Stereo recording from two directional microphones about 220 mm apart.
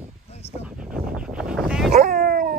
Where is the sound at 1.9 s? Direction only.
40° right (ahead or behind).